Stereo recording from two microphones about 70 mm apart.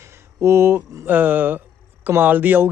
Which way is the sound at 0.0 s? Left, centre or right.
Right.